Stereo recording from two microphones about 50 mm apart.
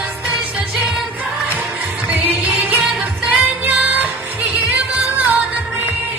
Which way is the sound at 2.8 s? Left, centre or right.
Right.